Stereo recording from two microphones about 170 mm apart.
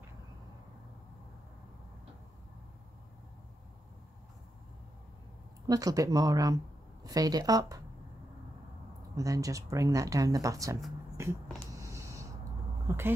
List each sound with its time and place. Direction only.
5.7 s speech: 20° right (ahead or behind)
9.1 s speech: 20° right (ahead or behind)
11.8 s a sound: 15° right (ahead or behind)